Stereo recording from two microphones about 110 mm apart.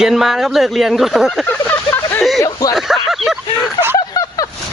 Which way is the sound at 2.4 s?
30° left (ahead or behind).